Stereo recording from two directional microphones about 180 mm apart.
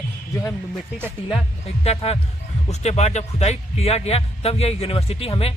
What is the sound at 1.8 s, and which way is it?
A man's voice, 35° left (ahead or behind).